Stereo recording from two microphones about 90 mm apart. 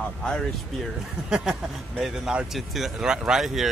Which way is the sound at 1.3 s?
Centre (ahead or behind).